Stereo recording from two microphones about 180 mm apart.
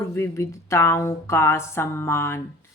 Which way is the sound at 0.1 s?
15° left (ahead or behind).